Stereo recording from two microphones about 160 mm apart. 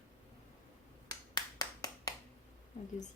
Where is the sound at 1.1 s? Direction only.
20° left (ahead or behind).